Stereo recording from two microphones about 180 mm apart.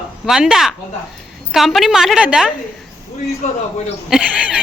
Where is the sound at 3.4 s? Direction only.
40° left (ahead or behind).